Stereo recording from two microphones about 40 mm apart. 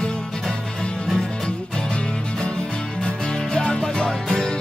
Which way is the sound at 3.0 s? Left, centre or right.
Left.